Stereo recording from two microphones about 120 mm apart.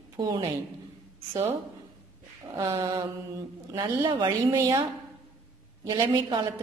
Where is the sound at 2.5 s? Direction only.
30° right (ahead or behind).